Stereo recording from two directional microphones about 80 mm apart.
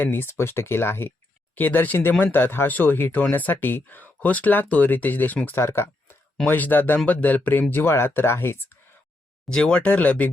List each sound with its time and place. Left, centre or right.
0.0 s speech: left
5.5 s speech: left
9.5 s speech: centre